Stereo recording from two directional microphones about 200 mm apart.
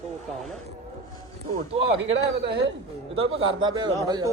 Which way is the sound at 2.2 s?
55° right (ahead or behind).